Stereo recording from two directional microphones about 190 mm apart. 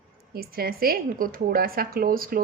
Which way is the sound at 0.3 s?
50° right (ahead or behind).